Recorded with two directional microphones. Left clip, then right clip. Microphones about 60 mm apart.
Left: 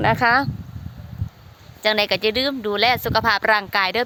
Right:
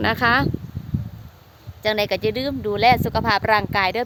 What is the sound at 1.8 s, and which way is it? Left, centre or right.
Speech, right.